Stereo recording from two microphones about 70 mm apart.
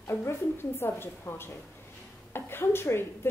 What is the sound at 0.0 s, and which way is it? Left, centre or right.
A woman's voice, left.